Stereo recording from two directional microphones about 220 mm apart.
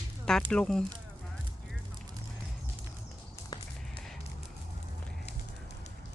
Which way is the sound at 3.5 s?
15° left (ahead or behind).